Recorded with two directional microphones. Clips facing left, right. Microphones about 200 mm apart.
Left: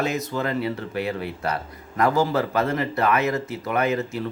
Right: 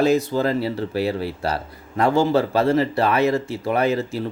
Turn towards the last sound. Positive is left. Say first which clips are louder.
# right 3 dB
turn(degrees=-30)  # may be behind; listen again after turning